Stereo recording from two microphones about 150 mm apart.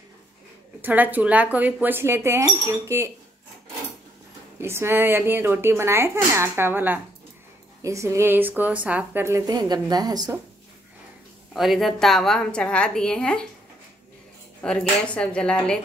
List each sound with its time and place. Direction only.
0.7 s speech: 10° right (ahead or behind)
4.6 s a woman's voice: 15° right (ahead or behind)
11.5 s a woman's voice: centre (ahead or behind)
14.6 s speech: 5° left (ahead or behind)